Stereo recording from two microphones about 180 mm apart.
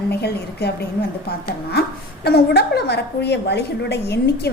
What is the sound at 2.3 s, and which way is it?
A woman's voice, 65° left (ahead or behind).